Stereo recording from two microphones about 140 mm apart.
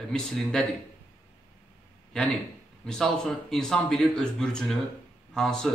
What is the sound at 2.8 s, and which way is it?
A man's voice, 5° left (ahead or behind).